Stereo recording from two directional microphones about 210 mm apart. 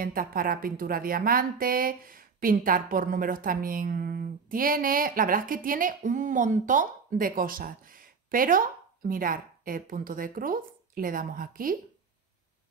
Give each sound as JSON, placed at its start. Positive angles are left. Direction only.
{"t": 0.0, "sound": "speech", "side_deg": -45}